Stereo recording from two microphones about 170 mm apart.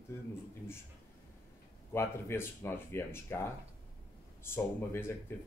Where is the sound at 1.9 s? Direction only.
15° left (ahead or behind).